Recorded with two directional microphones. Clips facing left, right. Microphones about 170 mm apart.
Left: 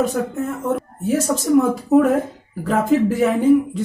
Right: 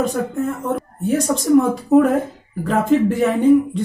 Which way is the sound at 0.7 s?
Centre (ahead or behind).